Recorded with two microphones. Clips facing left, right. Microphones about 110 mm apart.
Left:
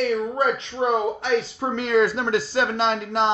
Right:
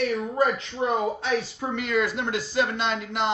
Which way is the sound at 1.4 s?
35° left (ahead or behind).